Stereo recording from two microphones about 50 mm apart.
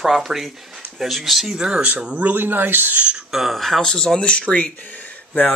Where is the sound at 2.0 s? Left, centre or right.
Right.